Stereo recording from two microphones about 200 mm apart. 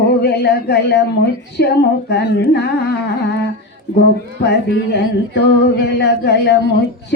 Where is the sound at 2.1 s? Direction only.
55° left (ahead or behind).